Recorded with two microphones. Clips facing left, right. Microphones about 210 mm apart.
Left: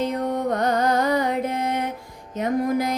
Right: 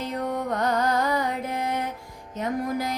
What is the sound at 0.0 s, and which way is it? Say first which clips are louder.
Music: left 4 dB; 20° left (ahead or behind).